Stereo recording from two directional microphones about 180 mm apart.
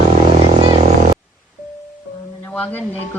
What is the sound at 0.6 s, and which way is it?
Vehicle, 30° right (ahead or behind).